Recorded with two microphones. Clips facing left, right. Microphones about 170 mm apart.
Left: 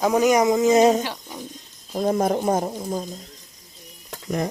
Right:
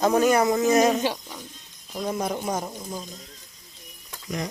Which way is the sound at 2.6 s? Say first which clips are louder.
Left 6 dB; 30° left (ahead or behind).